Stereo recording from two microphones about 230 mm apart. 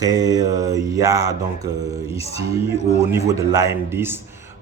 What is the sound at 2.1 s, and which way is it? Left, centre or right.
Speech, left.